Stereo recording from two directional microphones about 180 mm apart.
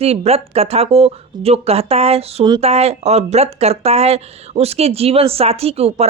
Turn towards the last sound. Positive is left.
turn(degrees=-35)  # may be behind; listen again after turning